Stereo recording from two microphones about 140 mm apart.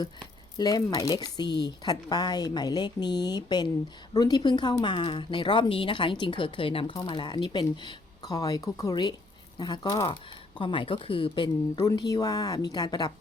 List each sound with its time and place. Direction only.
0.5 s speech: 30° left (ahead or behind)